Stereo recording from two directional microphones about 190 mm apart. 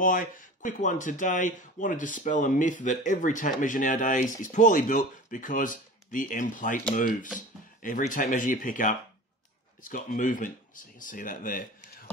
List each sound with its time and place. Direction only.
0.0 s speech: 45° left (ahead or behind)